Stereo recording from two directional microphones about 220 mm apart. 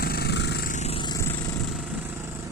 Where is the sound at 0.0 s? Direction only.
45° left (ahead or behind); by 1.4 s 15° left (ahead or behind).